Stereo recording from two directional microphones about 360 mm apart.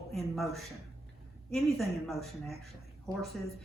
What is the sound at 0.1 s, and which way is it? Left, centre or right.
Speech, centre.